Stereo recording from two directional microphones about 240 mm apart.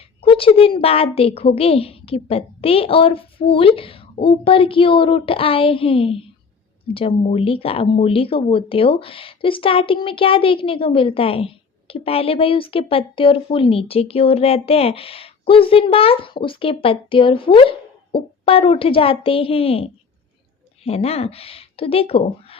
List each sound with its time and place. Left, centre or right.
0.2 s speech: left